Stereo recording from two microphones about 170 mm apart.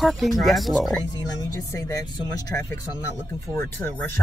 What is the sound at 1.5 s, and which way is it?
Speech, 20° left (ahead or behind).